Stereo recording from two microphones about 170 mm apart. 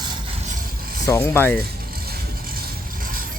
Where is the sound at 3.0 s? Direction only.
55° right (ahead or behind).